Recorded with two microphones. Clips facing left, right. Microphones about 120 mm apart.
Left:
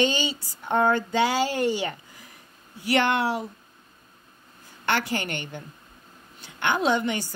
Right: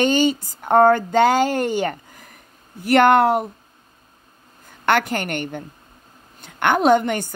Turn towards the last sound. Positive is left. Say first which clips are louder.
# right 8 dB
turn(degrees=-50)  # may be behind; listen again after turning